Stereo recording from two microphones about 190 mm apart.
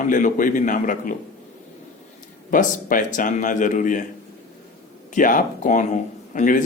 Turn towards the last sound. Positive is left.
turn(degrees=45)  # may be behind; listen again after turning